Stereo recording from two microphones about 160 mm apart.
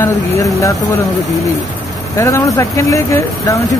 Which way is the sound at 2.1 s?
20° left (ahead or behind).